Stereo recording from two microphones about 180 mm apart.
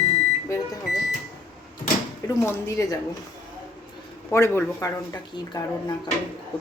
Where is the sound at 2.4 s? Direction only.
15° left (ahead or behind).